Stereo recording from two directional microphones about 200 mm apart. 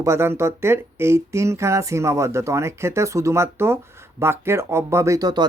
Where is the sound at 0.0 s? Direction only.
10° right (ahead or behind).